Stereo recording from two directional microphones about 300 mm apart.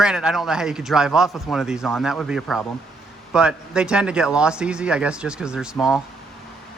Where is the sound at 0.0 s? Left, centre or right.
Centre.